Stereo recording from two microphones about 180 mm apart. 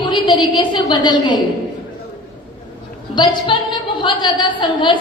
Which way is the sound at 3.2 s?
25° left (ahead or behind).